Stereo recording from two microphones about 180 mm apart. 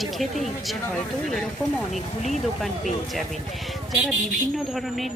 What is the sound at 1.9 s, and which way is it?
Speech, 40° left (ahead or behind).